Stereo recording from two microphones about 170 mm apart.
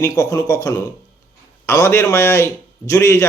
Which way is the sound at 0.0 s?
20° left (ahead or behind).